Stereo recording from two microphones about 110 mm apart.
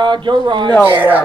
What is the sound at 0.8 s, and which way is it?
Speech, 15° right (ahead or behind).